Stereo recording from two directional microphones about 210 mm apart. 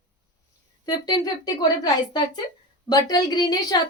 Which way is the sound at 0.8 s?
20° left (ahead or behind).